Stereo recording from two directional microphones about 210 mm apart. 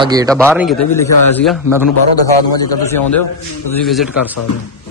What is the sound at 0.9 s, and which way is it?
Speech, 10° left (ahead or behind).